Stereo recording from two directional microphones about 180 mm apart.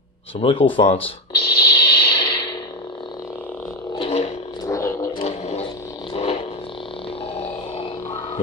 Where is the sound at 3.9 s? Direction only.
35° left (ahead or behind).